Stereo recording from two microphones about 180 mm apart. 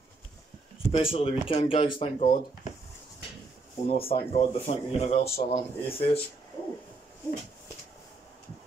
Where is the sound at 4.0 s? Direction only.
35° left (ahead or behind).